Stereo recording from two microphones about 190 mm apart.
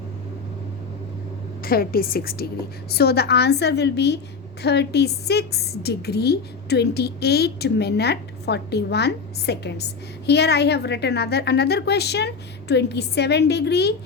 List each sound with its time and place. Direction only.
1.6 s a woman's voice: 50° left (ahead or behind)